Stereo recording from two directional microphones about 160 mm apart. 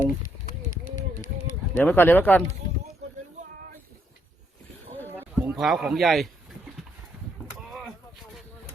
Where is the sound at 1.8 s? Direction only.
10° left (ahead or behind).